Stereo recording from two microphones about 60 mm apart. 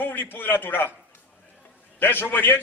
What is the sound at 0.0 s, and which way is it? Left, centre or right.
Speech, left.